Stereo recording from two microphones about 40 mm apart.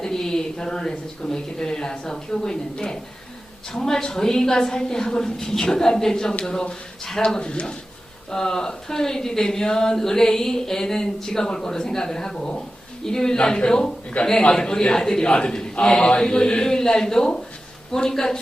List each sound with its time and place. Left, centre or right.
0.0 s a man's voice: centre
12.4 s a man's voice: left
14.5 s a man's voice: centre